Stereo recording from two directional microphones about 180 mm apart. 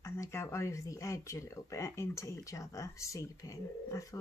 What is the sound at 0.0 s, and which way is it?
Speech, 15° left (ahead or behind).